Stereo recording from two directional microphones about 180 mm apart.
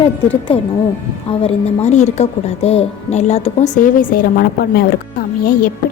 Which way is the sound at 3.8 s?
50° left (ahead or behind).